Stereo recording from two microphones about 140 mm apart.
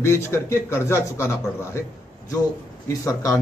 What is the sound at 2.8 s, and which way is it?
Speech, 20° left (ahead or behind).